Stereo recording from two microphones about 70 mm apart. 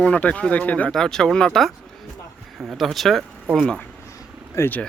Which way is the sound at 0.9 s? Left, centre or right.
Centre.